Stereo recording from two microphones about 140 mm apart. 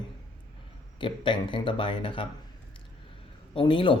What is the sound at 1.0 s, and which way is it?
Speech, 35° left (ahead or behind).